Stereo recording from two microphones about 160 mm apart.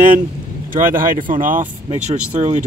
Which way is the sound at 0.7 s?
60° right (ahead or behind).